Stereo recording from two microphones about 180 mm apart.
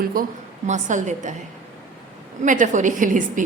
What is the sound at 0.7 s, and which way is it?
Speech, 45° right (ahead or behind).